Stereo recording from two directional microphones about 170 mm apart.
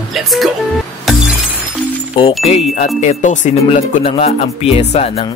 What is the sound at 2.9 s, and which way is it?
Speech, 45° left (ahead or behind).